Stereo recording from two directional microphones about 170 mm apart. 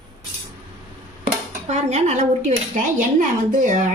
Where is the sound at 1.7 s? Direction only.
40° right (ahead or behind).